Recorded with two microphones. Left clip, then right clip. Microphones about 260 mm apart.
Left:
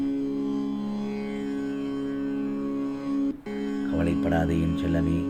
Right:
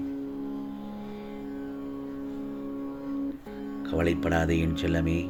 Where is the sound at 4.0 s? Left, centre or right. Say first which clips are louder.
Right 1 dB; right.